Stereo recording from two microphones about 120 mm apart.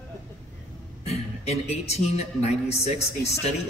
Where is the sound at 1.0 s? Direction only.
60° left (ahead or behind).